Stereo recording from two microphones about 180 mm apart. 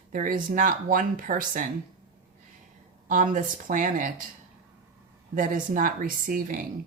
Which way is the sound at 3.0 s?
45° right (ahead or behind).